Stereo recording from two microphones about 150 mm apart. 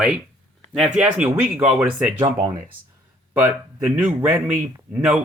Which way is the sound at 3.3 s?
15° right (ahead or behind).